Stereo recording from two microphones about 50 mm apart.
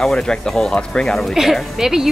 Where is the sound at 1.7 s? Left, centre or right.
Centre.